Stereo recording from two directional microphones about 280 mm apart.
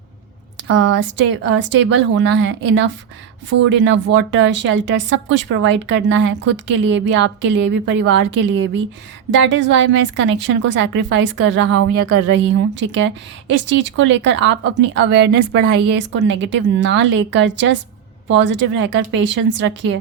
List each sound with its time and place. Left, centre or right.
0.7 s speech: right